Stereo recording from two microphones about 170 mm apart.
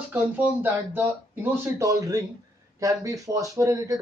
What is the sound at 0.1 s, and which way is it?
Speech, 10° right (ahead or behind).